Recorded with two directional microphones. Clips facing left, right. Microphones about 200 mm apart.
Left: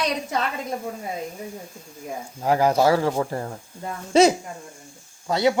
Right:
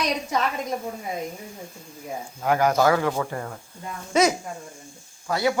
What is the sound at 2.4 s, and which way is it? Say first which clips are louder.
Speech: left 1 dB; 30° left (ahead or behind).